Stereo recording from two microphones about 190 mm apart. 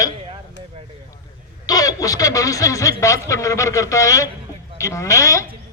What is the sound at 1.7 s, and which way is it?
Speech, 20° left (ahead or behind).